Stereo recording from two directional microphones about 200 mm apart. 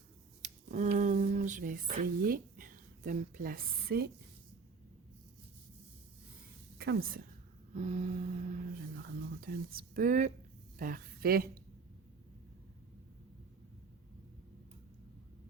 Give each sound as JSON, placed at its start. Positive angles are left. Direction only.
{"t": 0.4, "sound": "a sound", "side_deg": -40}
{"t": 6.7, "sound": "a woman's voice", "side_deg": -55}
{"t": 7.7, "sound": "a woman's voice", "side_deg": -35}